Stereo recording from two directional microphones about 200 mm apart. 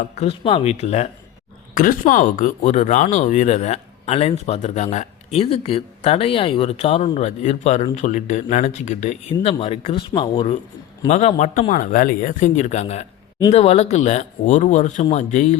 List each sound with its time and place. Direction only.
0.2 s speech: 30° left (ahead or behind)
1.7 s speech: 45° left (ahead or behind)